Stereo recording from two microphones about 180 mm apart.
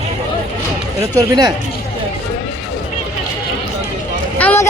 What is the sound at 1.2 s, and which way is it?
Speech, 20° right (ahead or behind).